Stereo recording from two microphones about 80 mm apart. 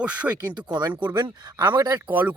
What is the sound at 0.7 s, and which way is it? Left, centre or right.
Speech, right.